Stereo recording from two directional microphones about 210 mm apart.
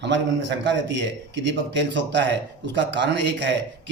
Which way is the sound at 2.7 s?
60° right (ahead or behind).